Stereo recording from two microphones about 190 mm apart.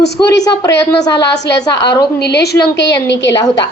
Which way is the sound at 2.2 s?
60° left (ahead or behind).